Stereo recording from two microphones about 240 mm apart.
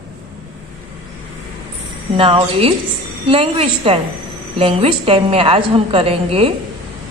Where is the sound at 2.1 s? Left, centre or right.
Right.